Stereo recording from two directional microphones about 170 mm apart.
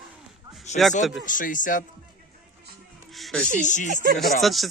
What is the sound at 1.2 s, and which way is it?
Speech, 50° left (ahead or behind).